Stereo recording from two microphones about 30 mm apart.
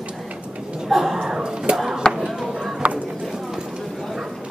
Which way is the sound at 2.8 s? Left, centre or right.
Right.